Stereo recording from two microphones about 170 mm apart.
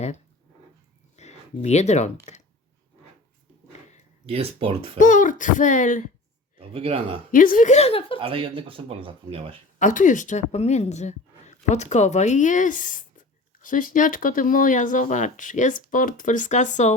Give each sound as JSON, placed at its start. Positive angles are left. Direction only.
{"t": 1.1, "sound": "a sound", "side_deg": 40}
{"t": 4.3, "sound": "speech", "side_deg": -35}
{"t": 4.9, "sound": "speech", "side_deg": 50}
{"t": 6.6, "sound": "speech", "side_deg": -35}
{"t": 7.3, "sound": "speech", "side_deg": 50}
{"t": 8.2, "sound": "speech", "side_deg": -30}
{"t": 9.7, "sound": "speech", "side_deg": 50}